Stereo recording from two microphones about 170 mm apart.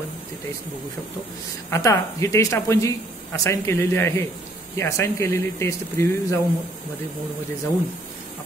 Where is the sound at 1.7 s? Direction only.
20° left (ahead or behind).